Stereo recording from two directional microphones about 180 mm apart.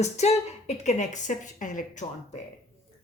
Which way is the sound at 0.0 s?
40° left (ahead or behind).